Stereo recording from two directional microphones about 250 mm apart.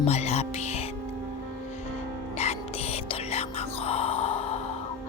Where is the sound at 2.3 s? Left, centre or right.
Left.